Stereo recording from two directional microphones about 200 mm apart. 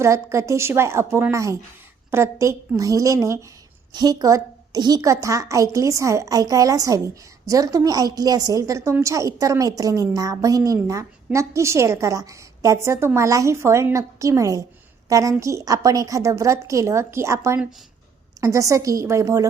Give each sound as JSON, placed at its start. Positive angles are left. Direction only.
{"t": 0.0, "sound": "a woman's voice", "side_deg": -15}